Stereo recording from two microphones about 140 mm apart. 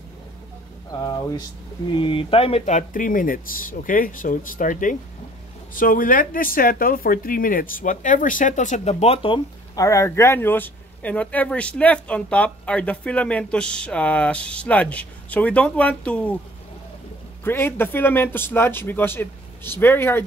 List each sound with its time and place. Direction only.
0.9 s speech: 30° left (ahead or behind); by 4.9 s 70° left (ahead or behind)
5.8 s speech: 80° left; by 9.4 s 40° left (ahead or behind)
9.8 s speech: 20° left (ahead or behind)
17.4 s speech: 15° left (ahead or behind)